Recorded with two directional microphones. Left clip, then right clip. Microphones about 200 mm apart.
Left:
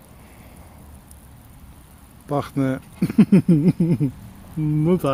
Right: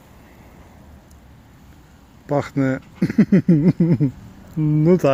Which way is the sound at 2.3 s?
5° right (ahead or behind).